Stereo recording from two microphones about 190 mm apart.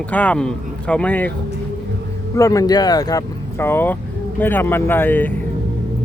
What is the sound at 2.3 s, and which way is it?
Speech, 15° left (ahead or behind).